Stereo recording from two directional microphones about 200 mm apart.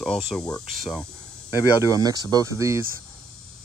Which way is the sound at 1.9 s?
20° right (ahead or behind).